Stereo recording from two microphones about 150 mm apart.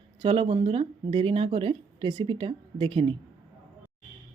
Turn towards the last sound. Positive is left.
turn(degrees=-35)  # may be behind; listen again after turning